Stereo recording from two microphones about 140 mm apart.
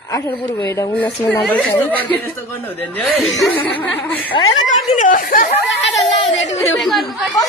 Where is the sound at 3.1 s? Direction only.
Centre (ahead or behind).